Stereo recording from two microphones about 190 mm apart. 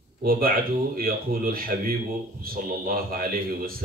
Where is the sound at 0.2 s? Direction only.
50° right (ahead or behind).